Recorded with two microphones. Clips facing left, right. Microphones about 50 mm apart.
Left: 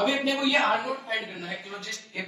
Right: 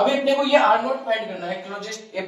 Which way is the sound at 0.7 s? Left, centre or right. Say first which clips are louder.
Right 7 dB; centre.